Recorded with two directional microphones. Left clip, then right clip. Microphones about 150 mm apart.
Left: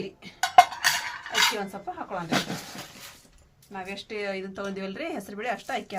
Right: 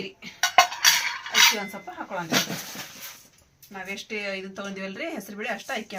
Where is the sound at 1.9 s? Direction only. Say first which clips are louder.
Left 2 dB; 40° left (ahead or behind).